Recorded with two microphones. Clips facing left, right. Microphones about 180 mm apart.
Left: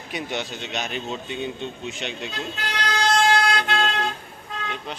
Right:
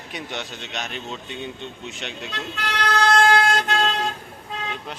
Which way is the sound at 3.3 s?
50° right (ahead or behind).